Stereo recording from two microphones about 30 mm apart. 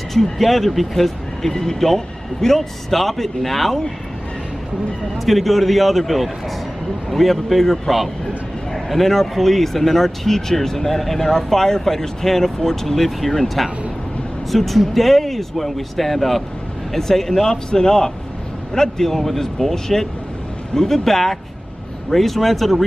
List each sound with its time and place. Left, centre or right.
0.1 s speech: centre
5.2 s speech: centre
17.5 s a man's voice: left; by 22.8 s centre